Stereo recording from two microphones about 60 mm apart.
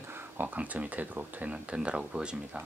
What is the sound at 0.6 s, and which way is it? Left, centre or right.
Speech, right.